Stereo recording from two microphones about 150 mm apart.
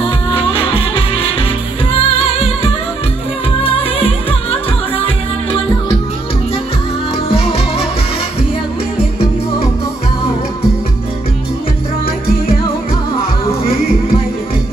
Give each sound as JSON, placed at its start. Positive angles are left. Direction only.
{"t": 0.3, "sound": "music", "side_deg": 40}
{"t": 7.2, "sound": "music", "side_deg": 40}